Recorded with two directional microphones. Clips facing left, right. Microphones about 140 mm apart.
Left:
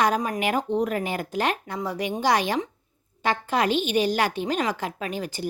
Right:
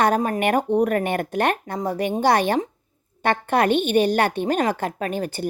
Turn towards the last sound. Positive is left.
turn(degrees=-50)  # may be behind; listen again after turning